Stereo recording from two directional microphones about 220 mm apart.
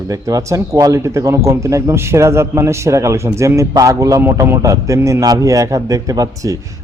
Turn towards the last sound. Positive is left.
turn(degrees=-15)  # may be behind; listen again after turning